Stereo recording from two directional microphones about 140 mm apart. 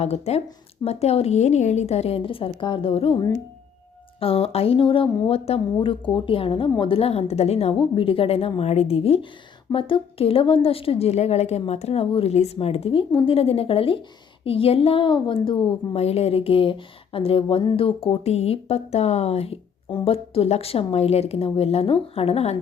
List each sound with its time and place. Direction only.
0.0 s a woman's voice: 50° left (ahead or behind)
4.2 s a woman's voice: 45° left (ahead or behind)
6.1 s a woman's voice: 35° left (ahead or behind)
19.9 s a woman's voice: 35° left (ahead or behind)